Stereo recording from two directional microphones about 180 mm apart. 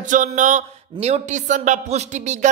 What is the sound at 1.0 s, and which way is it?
A man's voice, 40° right (ahead or behind).